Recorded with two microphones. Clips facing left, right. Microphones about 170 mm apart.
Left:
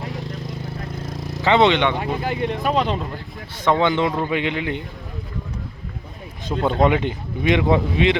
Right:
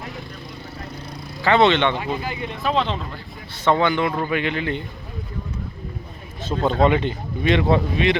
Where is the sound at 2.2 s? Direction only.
60° left (ahead or behind).